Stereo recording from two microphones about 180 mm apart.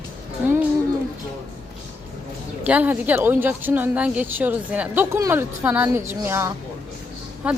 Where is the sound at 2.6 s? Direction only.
10° right (ahead or behind).